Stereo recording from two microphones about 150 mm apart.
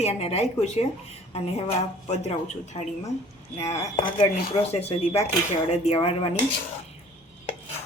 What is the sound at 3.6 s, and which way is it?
A woman's voice, 45° left (ahead or behind).